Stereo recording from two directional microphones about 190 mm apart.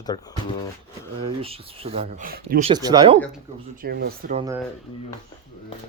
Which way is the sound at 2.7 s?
20° right (ahead or behind).